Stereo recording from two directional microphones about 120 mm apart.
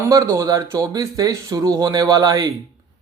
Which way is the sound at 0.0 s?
25° right (ahead or behind).